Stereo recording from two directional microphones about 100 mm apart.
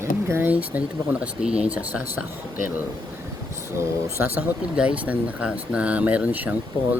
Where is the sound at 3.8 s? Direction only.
25° right (ahead or behind).